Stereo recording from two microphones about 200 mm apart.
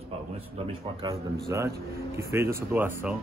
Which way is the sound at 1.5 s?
15° right (ahead or behind).